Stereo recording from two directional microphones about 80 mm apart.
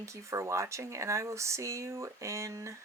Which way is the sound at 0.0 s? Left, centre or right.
Right.